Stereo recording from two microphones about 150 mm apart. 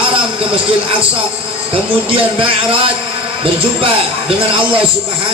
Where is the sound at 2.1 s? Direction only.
35° right (ahead or behind).